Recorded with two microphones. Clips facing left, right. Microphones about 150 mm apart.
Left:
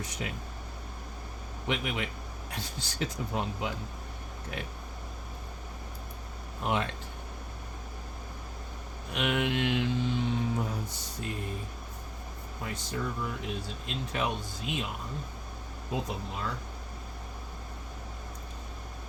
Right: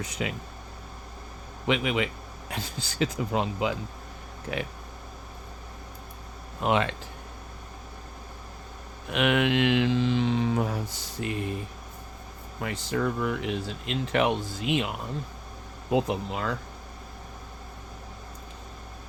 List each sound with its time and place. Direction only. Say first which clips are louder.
0.2 s speech: right 6 dB; 90° right
1.6 s speech: right 7 dB; 90° right
6.6 s speech: right 6 dB; 90° right
9.1 s speech: right 6 dB; 90° right
12.6 s speech: right 7 dB; 75° right (ahead or behind)
15.9 s speech: right 9 dB; 75° right (ahead or behind)